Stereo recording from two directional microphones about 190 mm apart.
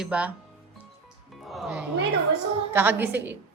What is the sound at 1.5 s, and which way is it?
Music, centre (ahead or behind).